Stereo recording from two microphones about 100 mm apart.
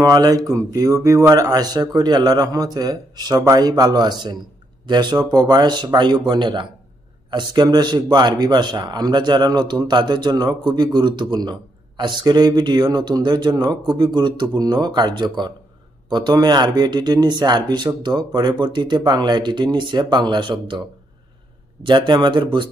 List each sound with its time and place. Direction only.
0.0 s a man's voice: 40° right (ahead or behind)
21.8 s speech: 55° right (ahead or behind)